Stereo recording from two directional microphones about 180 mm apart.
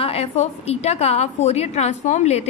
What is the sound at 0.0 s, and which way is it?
A woman's voice, 35° left (ahead or behind).